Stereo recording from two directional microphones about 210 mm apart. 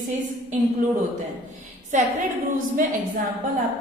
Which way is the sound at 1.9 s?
35° right (ahead or behind).